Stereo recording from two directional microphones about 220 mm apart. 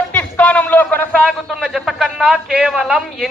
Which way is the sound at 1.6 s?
Centre (ahead or behind).